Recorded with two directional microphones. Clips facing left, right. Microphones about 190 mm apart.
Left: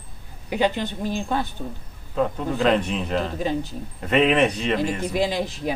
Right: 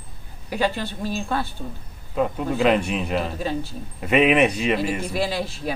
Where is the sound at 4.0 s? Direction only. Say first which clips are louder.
Right 1 dB; 10° right (ahead or behind).